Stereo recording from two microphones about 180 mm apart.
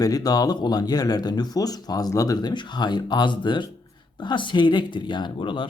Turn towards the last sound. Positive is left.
turn(degrees=25)  # may be behind; listen again after turning